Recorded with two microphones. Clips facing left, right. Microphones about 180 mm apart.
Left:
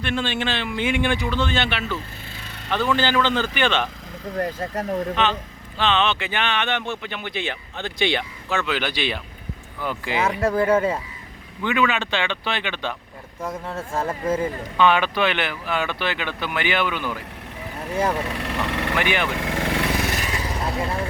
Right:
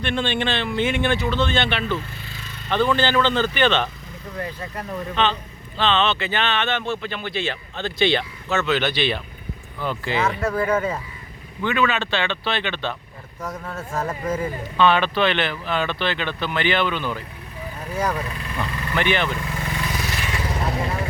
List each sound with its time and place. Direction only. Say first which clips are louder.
0.0 s speech: right 1 dB; 5° left (ahead or behind)
4.4 s speech: left 5 dB; 45° left (ahead or behind)
5.7 s speech: right 1 dB; 10° left (ahead or behind)
10.5 s speech: left 5 dB; 30° left (ahead or behind)
10.8 s speech: left 3 dB; 10° left (ahead or behind)
13.4 s speech: left 2 dB; 30° left (ahead or behind)
14.8 s speech: right 1 dB; 15° left (ahead or behind)
17.9 s speech: left 2 dB; 25° left (ahead or behind)
18.3 s speech: left 3 dB; 75° left (ahead or behind)
18.9 s speech: right 3 dB; 10° left (ahead or behind)
19.3 s vehicle: left 4 dB; 90° left; by 20.0 s 75° left (ahead or behind)
20.1 s vehicle: left 2 dB; 45° left (ahead or behind)